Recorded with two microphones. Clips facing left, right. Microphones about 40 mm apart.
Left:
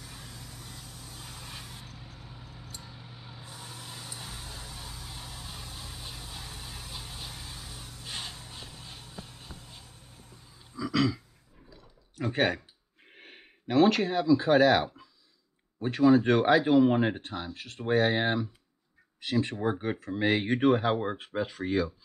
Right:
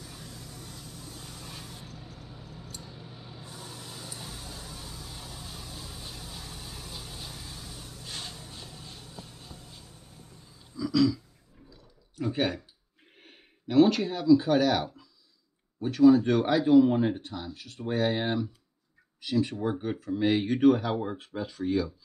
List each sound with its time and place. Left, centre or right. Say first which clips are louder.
0.0 s vehicle: right 1 dB; centre
10.9 s a sound: right 3 dB; left
12.2 s speech: left 1 dB; left
13.1 s gasp: left 4 dB; left
13.8 s speech: right 1 dB; left